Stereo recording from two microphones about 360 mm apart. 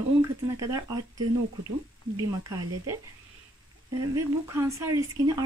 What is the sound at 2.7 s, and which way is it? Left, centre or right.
Speech, right.